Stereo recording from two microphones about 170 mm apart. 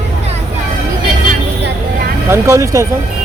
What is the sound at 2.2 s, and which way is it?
Speech, 15° right (ahead or behind).